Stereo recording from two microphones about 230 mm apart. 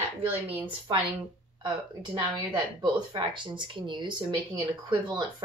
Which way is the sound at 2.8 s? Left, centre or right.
Centre.